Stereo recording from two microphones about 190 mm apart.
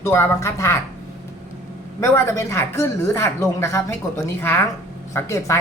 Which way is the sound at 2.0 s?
15° left (ahead or behind).